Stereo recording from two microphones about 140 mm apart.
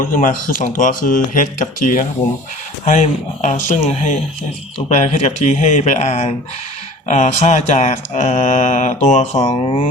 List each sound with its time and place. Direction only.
0.0 s speech: 70° left (ahead or behind)
2.8 s mantra: 60° left (ahead or behind)
9.4 s speech: 30° left (ahead or behind)